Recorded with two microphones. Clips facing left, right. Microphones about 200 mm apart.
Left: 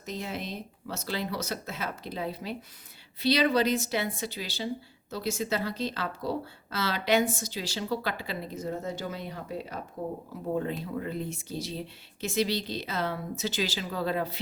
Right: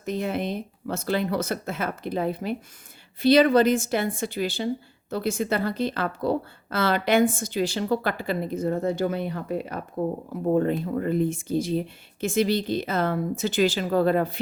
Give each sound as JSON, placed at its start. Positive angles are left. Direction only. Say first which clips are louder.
{"t": 0.0, "sound": "speech", "louder": "right 9 dB", "side_deg": -55}